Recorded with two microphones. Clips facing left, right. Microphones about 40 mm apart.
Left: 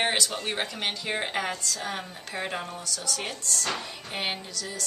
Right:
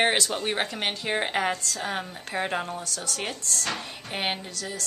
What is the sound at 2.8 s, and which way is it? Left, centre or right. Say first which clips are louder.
Speech: even; right.